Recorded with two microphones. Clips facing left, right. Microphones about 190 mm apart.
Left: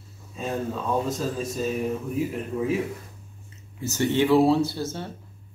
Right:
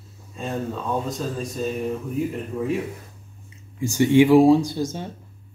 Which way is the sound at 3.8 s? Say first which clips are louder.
Right 7 dB; 15° right (ahead or behind).